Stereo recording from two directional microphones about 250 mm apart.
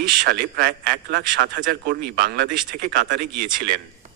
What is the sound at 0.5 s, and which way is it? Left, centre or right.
A man's voice, right.